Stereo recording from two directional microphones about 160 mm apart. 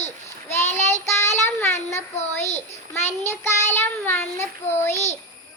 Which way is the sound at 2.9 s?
45° left (ahead or behind).